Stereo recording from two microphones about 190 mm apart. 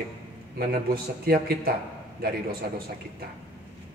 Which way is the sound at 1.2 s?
50° right (ahead or behind).